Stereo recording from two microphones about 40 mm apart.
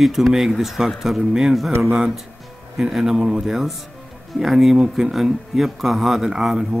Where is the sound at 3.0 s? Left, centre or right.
Centre.